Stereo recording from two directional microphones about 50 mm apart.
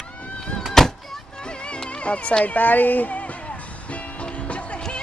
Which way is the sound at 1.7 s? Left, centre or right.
Left.